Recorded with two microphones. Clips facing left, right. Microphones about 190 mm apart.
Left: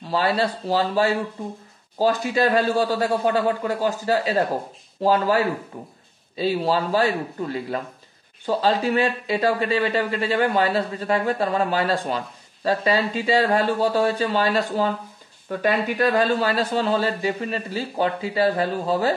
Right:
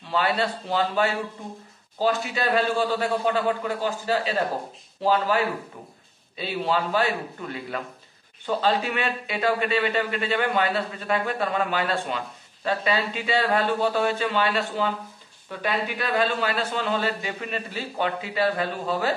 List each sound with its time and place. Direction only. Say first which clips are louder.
0.0 s a man's voice: left 3 dB; 40° left (ahead or behind)